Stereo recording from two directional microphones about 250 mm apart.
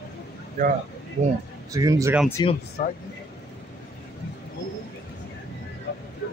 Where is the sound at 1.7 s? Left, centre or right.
Centre.